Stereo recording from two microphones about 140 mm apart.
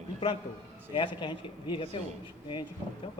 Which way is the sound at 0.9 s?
35° left (ahead or behind).